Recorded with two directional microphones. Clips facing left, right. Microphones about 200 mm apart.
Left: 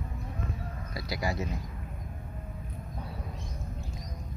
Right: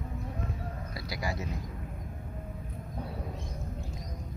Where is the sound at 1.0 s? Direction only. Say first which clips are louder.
Left 3 dB; 25° left (ahead or behind).